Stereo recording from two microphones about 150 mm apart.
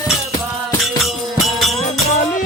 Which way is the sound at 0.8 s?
Centre (ahead or behind).